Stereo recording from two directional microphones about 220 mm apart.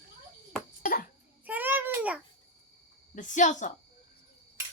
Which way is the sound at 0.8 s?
40° left (ahead or behind).